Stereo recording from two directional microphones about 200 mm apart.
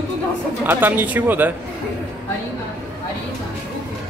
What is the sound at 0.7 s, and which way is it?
Speech, 10° right (ahead or behind).